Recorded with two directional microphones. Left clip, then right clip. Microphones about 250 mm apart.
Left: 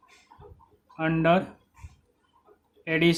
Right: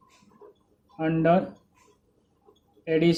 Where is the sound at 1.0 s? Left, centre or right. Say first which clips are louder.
Even; left.